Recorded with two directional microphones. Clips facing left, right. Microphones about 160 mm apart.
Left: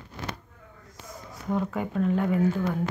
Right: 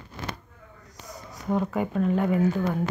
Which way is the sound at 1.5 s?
15° right (ahead or behind).